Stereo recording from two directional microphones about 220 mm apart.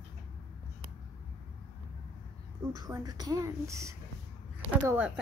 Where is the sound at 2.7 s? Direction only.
15° right (ahead or behind).